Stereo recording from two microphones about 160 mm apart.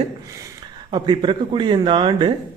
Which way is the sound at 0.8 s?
30° right (ahead or behind).